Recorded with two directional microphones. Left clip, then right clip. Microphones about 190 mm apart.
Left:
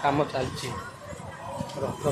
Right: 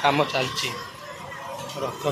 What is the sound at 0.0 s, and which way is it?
Speech, centre (ahead or behind).